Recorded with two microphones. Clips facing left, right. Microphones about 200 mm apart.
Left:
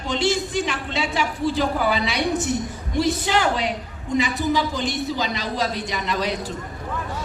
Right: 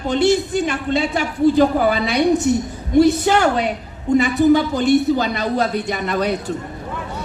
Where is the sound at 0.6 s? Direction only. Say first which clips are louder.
Right 7 dB; 55° right (ahead or behind).